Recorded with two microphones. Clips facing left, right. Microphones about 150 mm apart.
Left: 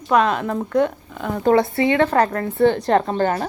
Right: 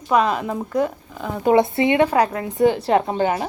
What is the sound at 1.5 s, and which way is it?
Speech, 20° right (ahead or behind).